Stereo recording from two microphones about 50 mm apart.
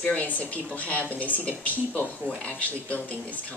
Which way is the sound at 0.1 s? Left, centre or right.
Left.